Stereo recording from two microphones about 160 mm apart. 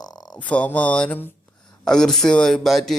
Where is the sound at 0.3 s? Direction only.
10° left (ahead or behind).